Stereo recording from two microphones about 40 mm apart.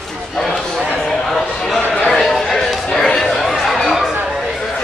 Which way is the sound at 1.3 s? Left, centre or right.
Centre.